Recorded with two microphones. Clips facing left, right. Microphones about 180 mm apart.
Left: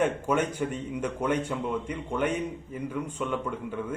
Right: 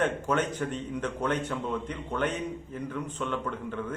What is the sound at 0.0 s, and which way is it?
Speech, 10° left (ahead or behind).